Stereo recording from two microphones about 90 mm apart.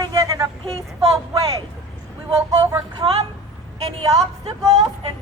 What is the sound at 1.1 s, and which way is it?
Speech, 40° right (ahead or behind).